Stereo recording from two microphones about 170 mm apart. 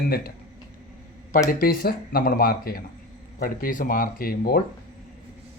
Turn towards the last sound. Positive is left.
turn(degrees=60)  # may be behind; listen again after turning